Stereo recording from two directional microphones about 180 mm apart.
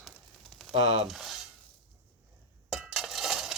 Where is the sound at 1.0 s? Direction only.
Centre (ahead or behind).